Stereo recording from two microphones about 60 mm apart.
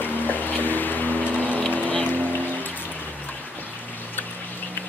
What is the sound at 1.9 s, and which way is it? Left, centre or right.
Boat, left.